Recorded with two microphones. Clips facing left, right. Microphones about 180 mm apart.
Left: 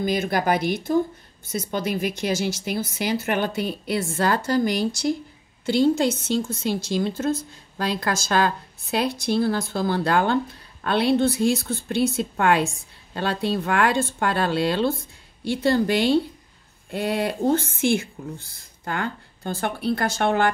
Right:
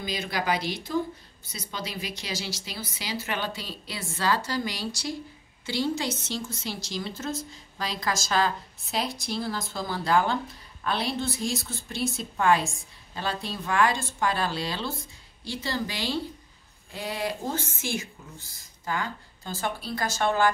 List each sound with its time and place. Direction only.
0.0 s a woman's voice: 50° left (ahead or behind)